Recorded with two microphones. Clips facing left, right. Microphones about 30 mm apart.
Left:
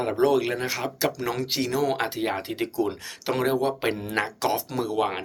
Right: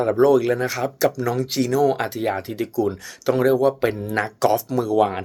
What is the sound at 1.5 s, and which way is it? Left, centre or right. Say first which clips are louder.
Speech: right 6 dB; left.